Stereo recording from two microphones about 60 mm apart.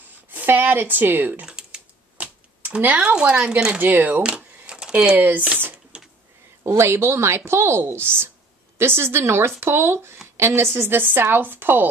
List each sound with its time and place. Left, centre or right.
0.3 s speech: right
1.4 s typing: centre
3.0 s speech: right
3.8 s speech: right
4.2 s a sound: centre
5.1 s speech: right
6.6 s speech: right